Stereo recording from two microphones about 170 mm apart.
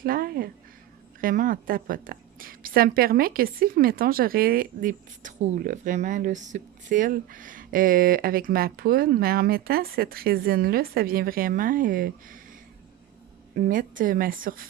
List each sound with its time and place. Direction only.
0.0 s a sound: 60° right (ahead or behind)
1.2 s a woman's voice: 55° right (ahead or behind)
13.6 s a woman's voice: 50° right (ahead or behind)